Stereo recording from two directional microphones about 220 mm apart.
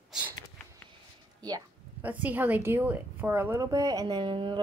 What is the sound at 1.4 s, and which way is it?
A woman's voice, 15° right (ahead or behind).